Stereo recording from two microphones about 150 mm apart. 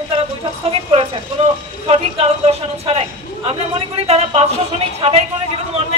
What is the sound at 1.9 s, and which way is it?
A man's voice, 40° right (ahead or behind).